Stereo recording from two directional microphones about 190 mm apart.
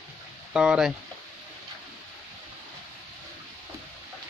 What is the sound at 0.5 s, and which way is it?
Speech, 5° right (ahead or behind).